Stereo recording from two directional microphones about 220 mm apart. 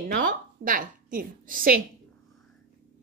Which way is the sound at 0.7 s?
40° right (ahead or behind).